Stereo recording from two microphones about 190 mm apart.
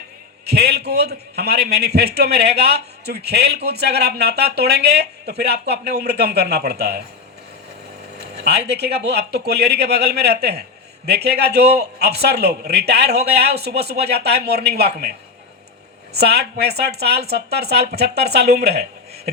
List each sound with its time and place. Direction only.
0.4 s a man's voice: 55° right (ahead or behind)
8.4 s a man's voice: 60° right (ahead or behind)
16.1 s a man's voice: 60° right (ahead or behind)